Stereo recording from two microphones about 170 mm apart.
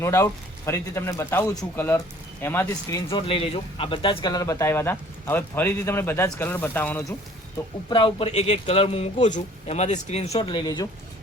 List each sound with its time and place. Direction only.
0.0 s speech: 15° left (ahead or behind)
2.6 s speech: 25° left (ahead or behind)
7.9 s speech: 30° left (ahead or behind)
10.5 s speech: 25° left (ahead or behind)